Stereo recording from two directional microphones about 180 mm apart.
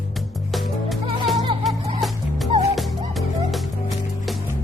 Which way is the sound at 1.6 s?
Centre (ahead or behind).